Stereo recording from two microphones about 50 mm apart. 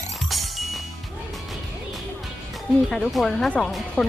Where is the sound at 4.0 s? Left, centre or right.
Centre.